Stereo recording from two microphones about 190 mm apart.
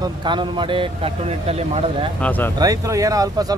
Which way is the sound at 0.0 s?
25° right (ahead or behind).